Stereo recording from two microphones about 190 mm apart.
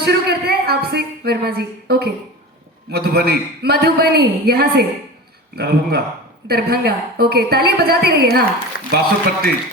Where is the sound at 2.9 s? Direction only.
55° right (ahead or behind).